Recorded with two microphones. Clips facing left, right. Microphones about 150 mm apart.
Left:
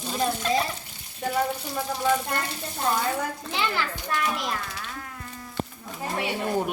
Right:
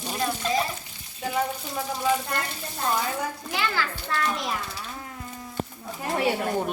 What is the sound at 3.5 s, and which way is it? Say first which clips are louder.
Speech: even; 20° left (ahead or behind).